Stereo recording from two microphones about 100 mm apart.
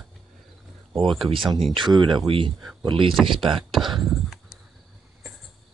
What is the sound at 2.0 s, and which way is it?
Speech, 55° right (ahead or behind).